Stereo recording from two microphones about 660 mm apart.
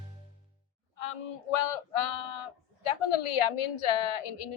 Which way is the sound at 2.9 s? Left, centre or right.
Left.